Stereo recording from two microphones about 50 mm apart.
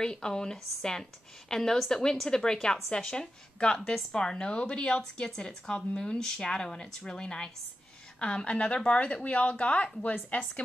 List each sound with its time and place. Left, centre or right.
0.0 s a woman's voice: centre